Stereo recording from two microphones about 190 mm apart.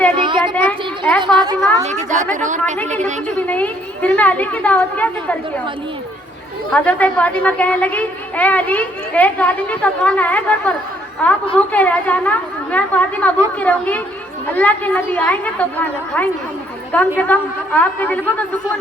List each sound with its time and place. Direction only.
0.2 s a sound: 25° right (ahead or behind)
0.5 s a sound: 10° left (ahead or behind)
1.2 s a woman's voice: 25° right (ahead or behind)
1.8 s a woman's voice: 40° right (ahead or behind)
2.7 s a woman's voice: 10° left (ahead or behind)
6.7 s a woman's voice: 5° left (ahead or behind)